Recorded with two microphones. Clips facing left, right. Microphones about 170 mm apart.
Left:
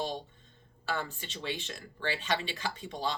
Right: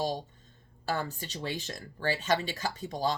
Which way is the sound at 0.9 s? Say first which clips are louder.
Right 3 dB; 40° right (ahead or behind).